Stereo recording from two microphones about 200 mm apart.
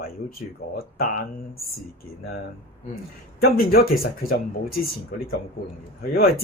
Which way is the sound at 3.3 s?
50° left (ahead or behind).